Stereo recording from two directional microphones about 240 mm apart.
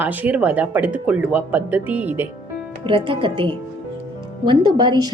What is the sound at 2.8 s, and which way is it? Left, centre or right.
Speech, right.